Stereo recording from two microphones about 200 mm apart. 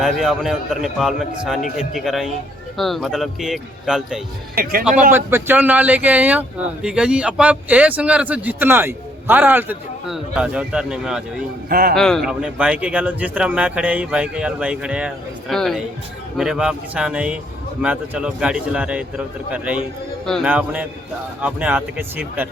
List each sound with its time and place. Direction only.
0.0 s speech: centre (ahead or behind)
4.5 s a man's voice: 45° right (ahead or behind)
5.1 s speech: 10° right (ahead or behind)
11.7 s a man's voice: 45° right (ahead or behind)
11.9 s speech: centre (ahead or behind)